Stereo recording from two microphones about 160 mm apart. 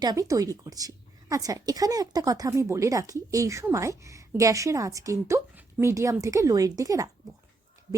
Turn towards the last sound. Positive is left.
turn(degrees=-20)  # may be behind; listen again after turning